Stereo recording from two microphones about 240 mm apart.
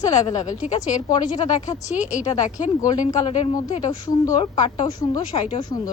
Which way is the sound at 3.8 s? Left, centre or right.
Centre.